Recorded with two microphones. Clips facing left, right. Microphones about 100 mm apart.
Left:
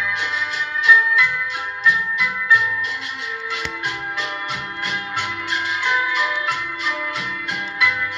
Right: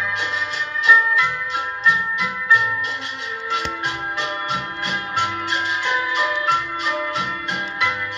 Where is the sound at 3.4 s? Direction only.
40° right (ahead or behind).